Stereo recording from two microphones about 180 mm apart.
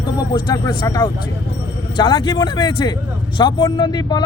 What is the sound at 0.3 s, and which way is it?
A man's voice, 20° left (ahead or behind).